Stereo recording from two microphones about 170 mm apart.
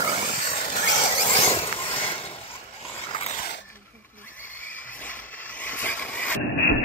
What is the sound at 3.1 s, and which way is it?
Dog, 35° left (ahead or behind).